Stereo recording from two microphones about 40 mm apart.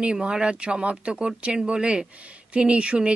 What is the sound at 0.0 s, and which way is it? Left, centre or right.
A woman's voice, right.